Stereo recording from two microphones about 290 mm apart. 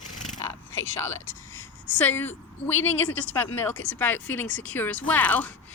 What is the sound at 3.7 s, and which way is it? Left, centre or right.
Speech, left.